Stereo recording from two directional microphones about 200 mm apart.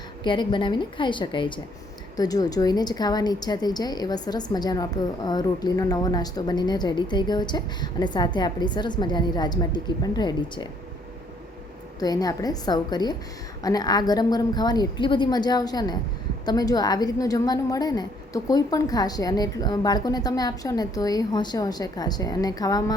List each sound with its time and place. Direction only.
0.3 s a woman's voice: 25° left (ahead or behind)
11.9 s a woman's voice: 20° left (ahead or behind)